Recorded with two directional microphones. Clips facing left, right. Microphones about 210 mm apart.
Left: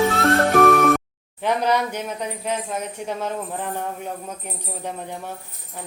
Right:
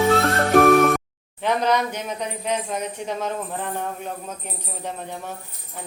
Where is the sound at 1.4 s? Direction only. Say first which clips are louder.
Even; 10° left (ahead or behind).